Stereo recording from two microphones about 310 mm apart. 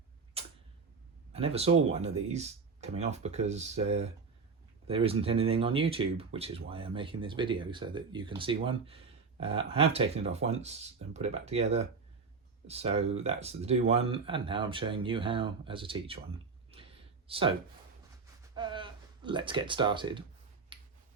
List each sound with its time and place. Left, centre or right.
0.4 s tick-tock: centre
1.3 s speech: centre
16.7 s a sound: centre
17.2 s speech: centre
18.5 s speech: centre
20.7 s tick-tock: centre